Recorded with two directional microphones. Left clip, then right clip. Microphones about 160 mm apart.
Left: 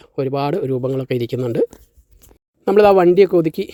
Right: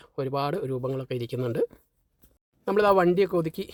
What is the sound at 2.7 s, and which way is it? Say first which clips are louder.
Speech: left 10 dB; 35° left (ahead or behind).